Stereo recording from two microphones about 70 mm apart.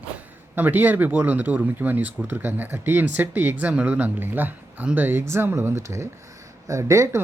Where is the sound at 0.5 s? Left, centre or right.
Right.